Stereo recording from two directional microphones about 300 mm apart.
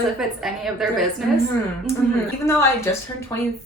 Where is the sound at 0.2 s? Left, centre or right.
Centre.